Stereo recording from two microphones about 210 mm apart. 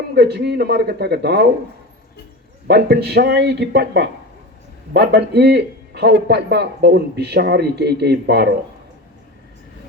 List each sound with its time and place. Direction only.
0.2 s a man's voice: 50° right (ahead or behind)
2.6 s a man's voice: 50° right (ahead or behind)